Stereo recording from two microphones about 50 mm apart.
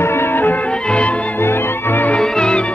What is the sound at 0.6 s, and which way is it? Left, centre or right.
Music, left.